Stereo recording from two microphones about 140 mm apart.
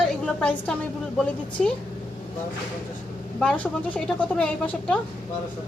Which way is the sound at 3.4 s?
10° left (ahead or behind).